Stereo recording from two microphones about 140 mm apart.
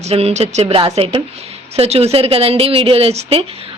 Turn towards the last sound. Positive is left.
turn(degrees=-45)  # may be behind; listen again after turning